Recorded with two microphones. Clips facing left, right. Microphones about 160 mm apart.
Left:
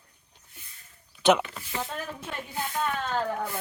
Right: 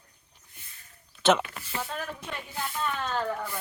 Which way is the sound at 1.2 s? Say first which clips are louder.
Left 2 dB; 15° left (ahead or behind).